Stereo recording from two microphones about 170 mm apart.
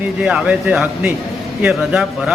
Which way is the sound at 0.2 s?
5° right (ahead or behind).